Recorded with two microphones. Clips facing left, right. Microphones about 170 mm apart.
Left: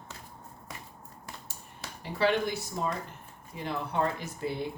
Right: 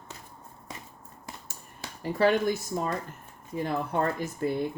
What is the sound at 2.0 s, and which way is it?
Speech, 45° right (ahead or behind).